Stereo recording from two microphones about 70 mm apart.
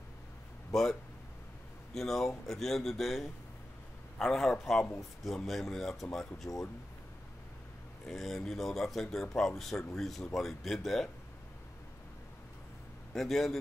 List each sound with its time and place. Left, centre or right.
2.0 s speech: centre
6.5 s speech: left
8.1 s speech: centre
13.1 s speech: centre